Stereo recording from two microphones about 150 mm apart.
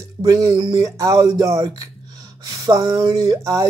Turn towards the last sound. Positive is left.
turn(degrees=-20)  # may be behind; listen again after turning